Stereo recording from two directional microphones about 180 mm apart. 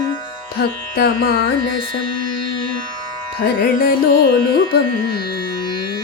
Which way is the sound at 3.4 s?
60° left (ahead or behind).